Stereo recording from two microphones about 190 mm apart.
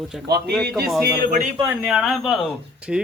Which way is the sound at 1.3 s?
40° right (ahead or behind).